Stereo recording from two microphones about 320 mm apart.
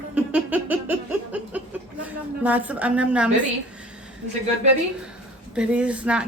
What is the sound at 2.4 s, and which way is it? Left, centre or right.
Speech, centre.